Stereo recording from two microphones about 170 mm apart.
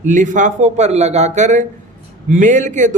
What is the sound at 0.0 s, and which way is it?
A man's voice, 45° right (ahead or behind).